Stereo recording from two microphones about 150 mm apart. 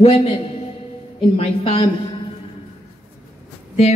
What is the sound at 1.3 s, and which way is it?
Speech, 40° left (ahead or behind).